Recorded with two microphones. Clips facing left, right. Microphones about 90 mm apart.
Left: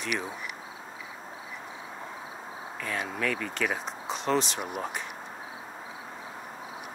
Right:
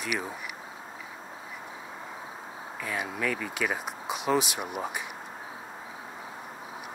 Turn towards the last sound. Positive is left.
turn(degrees=-5)  # may be behind; listen again after turning